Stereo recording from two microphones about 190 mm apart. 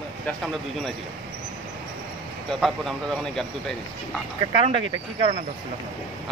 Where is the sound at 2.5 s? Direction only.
Centre (ahead or behind).